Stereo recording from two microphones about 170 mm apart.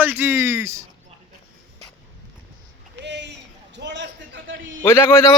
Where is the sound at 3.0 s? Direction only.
90° right.